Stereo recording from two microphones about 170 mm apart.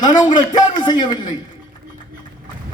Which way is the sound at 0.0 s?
25° left (ahead or behind).